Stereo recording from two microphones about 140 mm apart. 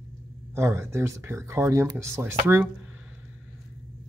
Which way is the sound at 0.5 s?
20° right (ahead or behind).